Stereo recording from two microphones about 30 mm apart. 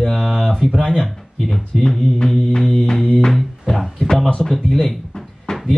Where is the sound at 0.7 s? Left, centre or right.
Left.